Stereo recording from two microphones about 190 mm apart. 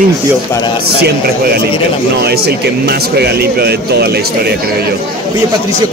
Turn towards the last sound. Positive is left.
turn(degrees=-55)  # may be behind; listen again after turning